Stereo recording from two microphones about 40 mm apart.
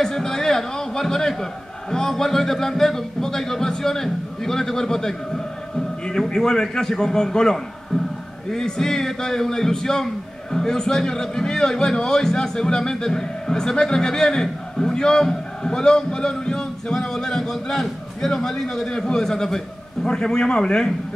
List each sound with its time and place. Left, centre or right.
0.0 s a man's voice: centre